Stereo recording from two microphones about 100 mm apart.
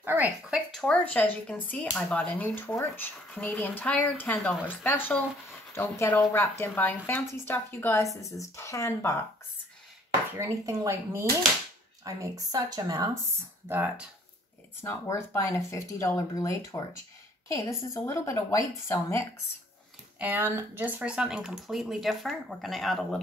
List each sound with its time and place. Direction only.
0.0 s a sound: 20° right (ahead or behind)
0.7 s a woman's voice: 10° left (ahead or behind)
8.2 s speech: 30° left (ahead or behind)
10.4 s speech: 30° right (ahead or behind)
13.7 s speech: 20° right (ahead or behind)
14.8 s speech: 30° left (ahead or behind)
20.2 s speech: 20° right (ahead or behind); by 23.2 s 5° left (ahead or behind)